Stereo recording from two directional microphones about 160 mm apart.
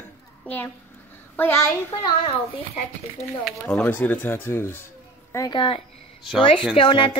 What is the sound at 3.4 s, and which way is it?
Speech, 10° left (ahead or behind).